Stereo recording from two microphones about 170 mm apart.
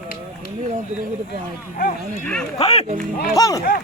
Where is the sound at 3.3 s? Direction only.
20° left (ahead or behind).